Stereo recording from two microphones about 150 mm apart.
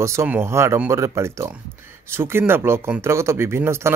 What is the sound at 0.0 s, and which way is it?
Speech, 20° right (ahead or behind).